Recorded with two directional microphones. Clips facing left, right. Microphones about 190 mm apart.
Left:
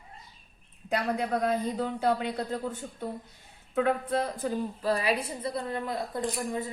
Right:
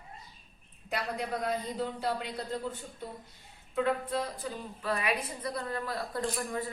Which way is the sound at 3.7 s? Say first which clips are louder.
Left 3 dB; 55° left (ahead or behind).